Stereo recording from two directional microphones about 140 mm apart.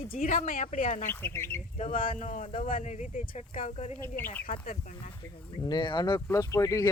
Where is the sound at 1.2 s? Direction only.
15° left (ahead or behind).